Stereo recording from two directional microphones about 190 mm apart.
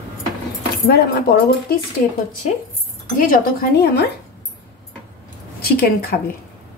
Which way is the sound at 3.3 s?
55° left (ahead or behind).